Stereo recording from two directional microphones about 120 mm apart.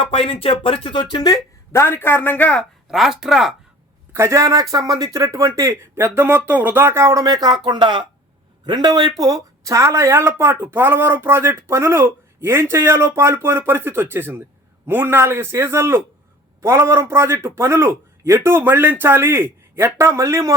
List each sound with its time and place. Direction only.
0.0 s speech: 50° left (ahead or behind); by 2.6 s 10° left (ahead or behind)
2.9 s speech: 5° right (ahead or behind)
4.1 s speech: 25° right (ahead or behind)